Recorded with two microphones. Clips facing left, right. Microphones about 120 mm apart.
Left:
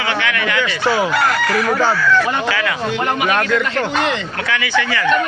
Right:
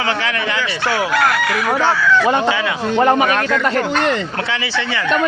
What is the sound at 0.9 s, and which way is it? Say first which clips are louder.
Chicken: even; centre (ahead or behind).